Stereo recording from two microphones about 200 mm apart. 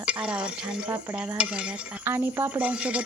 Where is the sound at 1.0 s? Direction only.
5° right (ahead or behind).